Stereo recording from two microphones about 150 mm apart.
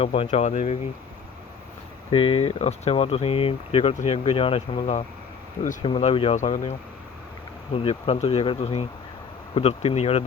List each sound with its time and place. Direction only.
0.0 s speech: 40° left (ahead or behind)
2.0 s speech: 35° left (ahead or behind); by 6.7 s 55° left (ahead or behind)
7.8 s speech: 40° left (ahead or behind)